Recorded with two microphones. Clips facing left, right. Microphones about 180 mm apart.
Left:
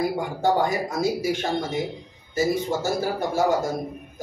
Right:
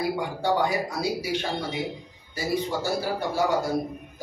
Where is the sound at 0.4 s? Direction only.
45° left (ahead or behind).